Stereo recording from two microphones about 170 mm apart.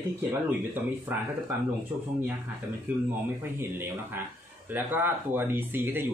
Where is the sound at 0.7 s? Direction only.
10° right (ahead or behind).